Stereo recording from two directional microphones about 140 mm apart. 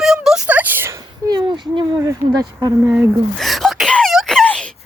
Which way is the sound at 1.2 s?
30° right (ahead or behind).